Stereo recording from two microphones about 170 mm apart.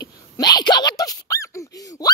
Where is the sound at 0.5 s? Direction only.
25° left (ahead or behind).